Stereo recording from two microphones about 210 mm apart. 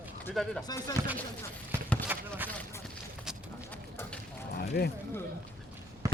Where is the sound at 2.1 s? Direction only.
10° right (ahead or behind).